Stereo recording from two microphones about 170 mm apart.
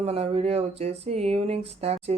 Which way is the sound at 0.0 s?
35° right (ahead or behind).